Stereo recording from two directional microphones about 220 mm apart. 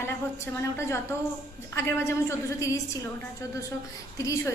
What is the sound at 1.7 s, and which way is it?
A woman's voice, 10° left (ahead or behind).